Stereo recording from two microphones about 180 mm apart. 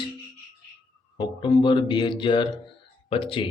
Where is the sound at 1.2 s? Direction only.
25° left (ahead or behind).